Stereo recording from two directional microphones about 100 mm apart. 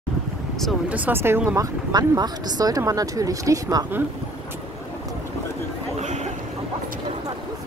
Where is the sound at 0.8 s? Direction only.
15° right (ahead or behind).